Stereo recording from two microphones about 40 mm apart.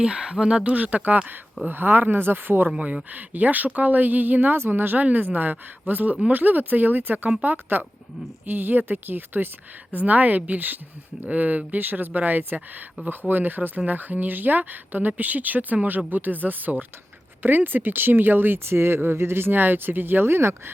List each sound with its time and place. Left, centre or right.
0.0 s speech: right
0.5 s speech: right
0.8 s speech: right
1.7 s speech: right
2.6 s speech: right
3.1 s speech: right
9.9 s speech: right